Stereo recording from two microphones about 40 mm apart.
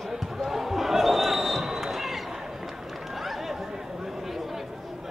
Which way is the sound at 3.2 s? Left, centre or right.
Centre.